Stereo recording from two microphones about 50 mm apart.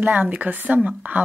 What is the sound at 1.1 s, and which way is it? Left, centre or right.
Speech, right.